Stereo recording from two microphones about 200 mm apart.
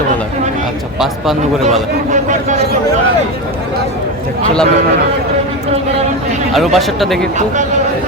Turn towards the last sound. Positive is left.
turn(degrees=0)  # may be behind; listen again after turning